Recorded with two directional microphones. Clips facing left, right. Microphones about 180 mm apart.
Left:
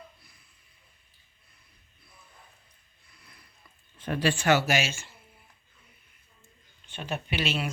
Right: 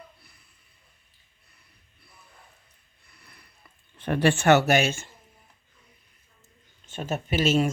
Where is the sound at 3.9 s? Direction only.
60° right (ahead or behind).